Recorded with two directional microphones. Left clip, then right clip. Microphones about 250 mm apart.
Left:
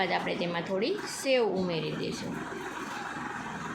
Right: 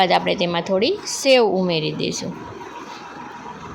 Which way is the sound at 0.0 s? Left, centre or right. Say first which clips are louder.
Right 12 dB; right.